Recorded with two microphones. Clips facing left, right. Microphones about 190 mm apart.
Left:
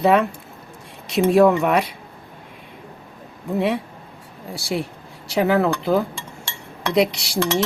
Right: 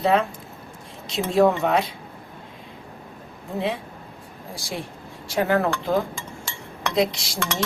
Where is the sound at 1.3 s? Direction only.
70° left (ahead or behind).